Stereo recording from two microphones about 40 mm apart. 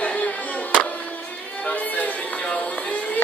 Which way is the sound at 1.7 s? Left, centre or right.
Left.